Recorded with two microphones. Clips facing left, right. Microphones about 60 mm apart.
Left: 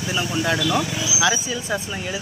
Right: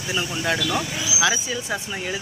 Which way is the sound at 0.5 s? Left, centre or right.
Centre.